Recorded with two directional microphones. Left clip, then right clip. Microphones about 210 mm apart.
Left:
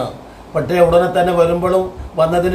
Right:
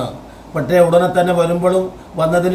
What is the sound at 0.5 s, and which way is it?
A man's voice, 5° left (ahead or behind).